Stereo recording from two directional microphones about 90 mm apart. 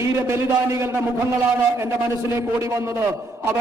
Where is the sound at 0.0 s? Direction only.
30° right (ahead or behind).